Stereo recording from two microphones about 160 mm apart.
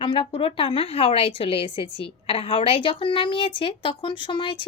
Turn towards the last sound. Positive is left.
turn(degrees=30)  # may be behind; listen again after turning